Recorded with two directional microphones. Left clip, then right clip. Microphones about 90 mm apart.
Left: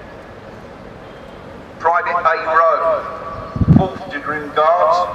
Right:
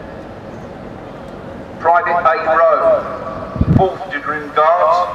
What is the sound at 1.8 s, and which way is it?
A man's voice, 20° left (ahead or behind).